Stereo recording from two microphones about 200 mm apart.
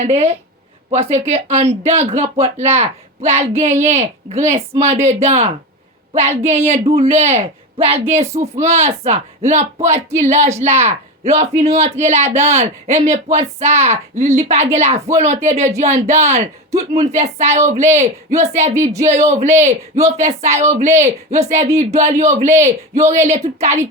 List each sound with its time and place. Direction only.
0.0 s speech: 30° right (ahead or behind)
18.7 s speech: 15° right (ahead or behind)
19.0 s speech: 35° right (ahead or behind)